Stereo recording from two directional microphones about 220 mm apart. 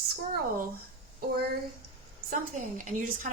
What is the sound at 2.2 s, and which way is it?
Speech, 40° right (ahead or behind).